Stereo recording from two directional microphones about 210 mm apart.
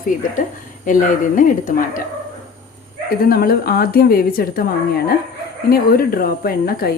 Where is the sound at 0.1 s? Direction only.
40° left (ahead or behind).